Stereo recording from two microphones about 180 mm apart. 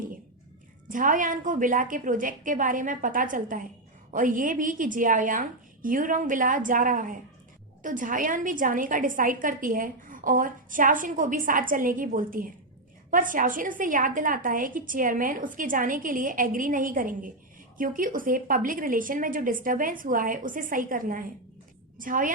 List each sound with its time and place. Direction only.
0.9 s a woman's voice: 45° right (ahead or behind)